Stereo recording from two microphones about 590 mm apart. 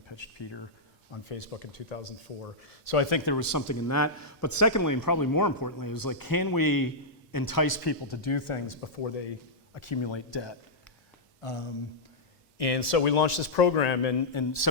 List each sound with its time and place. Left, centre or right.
0.1 s speech: left
1.1 s speech: left
2.9 s a man's voice: left
9.7 s speech: left
11.3 s a sound: left
12.5 s speech: left
14.3 s a man's voice: left